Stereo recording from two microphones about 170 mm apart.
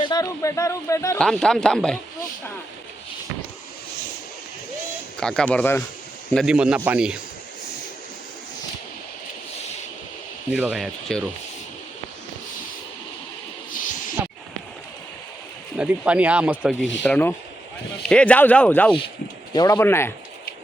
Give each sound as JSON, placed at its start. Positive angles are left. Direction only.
{"t": 0.0, "sound": "a man's voice", "side_deg": 20}
{"t": 1.2, "sound": "speech", "side_deg": 5}
{"t": 5.2, "sound": "a man's voice", "side_deg": 5}
{"t": 6.3, "sound": "speech", "side_deg": -5}
{"t": 10.5, "sound": "speech", "side_deg": -5}
{"t": 14.2, "sound": "a sound", "side_deg": -15}
{"t": 15.8, "sound": "speech", "side_deg": -5}
{"t": 17.0, "sound": "a man's voice", "side_deg": 10}
{"t": 19.5, "sound": "a man's voice", "side_deg": 20}